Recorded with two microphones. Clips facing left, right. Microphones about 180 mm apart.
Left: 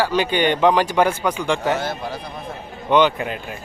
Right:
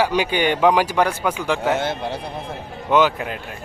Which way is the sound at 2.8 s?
5° right (ahead or behind).